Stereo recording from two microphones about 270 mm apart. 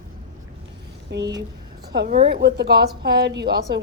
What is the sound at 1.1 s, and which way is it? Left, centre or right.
Speech, right.